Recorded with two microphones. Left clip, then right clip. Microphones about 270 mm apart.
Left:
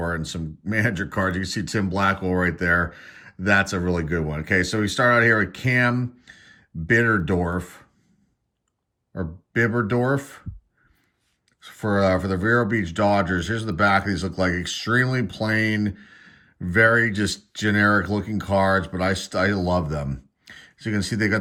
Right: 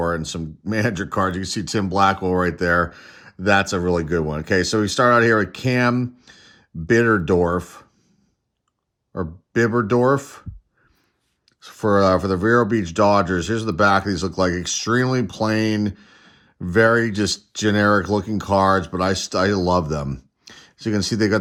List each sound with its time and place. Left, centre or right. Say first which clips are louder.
0.0 s speech: right 5 dB; centre
9.1 s speech: right 3 dB; centre
11.6 s speech: right 5 dB; centre